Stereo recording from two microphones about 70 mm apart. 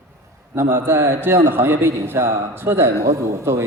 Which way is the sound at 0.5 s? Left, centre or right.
Right.